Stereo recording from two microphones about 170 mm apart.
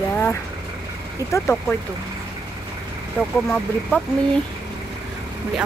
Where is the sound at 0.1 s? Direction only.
15° left (ahead or behind).